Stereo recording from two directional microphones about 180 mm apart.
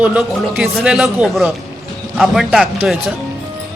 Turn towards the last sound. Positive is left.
turn(degrees=0)  # may be behind; listen again after turning